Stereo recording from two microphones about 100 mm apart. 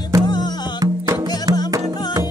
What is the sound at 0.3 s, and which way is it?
Music, 45° left (ahead or behind).